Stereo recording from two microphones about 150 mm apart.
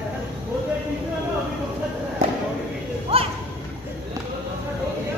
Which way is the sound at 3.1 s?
40° right (ahead or behind).